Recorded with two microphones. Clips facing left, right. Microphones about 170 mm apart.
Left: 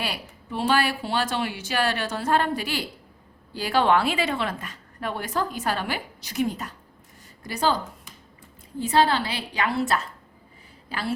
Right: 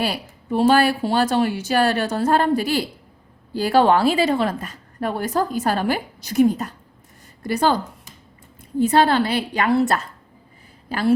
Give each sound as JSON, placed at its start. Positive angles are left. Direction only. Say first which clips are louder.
{"t": 0.0, "sound": "a woman's voice", "louder": "right 7 dB", "side_deg": -40}
{"t": 7.4, "sound": "a woman's voice", "louder": "right 5 dB", "side_deg": -55}
{"t": 8.8, "sound": "a woman's voice", "louder": "right 5 dB", "side_deg": -50}